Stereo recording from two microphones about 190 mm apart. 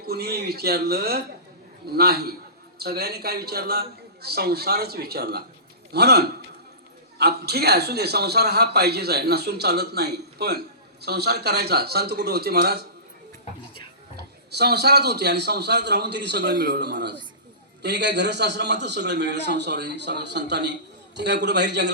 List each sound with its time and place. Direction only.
0.1 s a man's voice: 55° right (ahead or behind)
14.5 s a man's voice: 60° right (ahead or behind)